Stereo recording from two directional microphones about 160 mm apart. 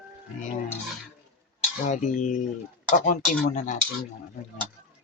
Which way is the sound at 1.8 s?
50° left (ahead or behind).